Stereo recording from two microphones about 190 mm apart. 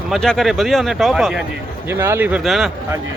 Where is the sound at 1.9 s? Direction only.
10° right (ahead or behind).